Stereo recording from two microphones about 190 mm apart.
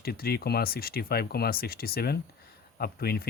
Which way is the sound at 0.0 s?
55° left (ahead or behind).